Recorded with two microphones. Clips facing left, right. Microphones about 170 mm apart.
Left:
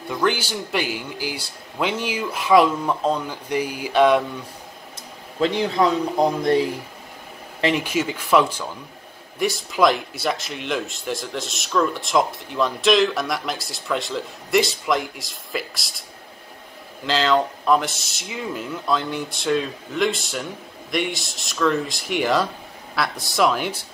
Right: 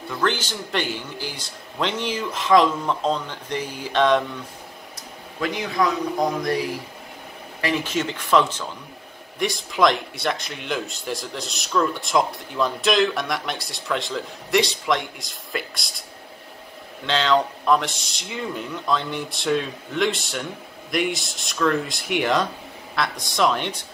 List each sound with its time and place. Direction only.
0.1 s speech: 10° left (ahead or behind)
5.4 s speech: 30° left (ahead or behind)
7.6 s speech: 15° left (ahead or behind)
17.0 s speech: centre (ahead or behind)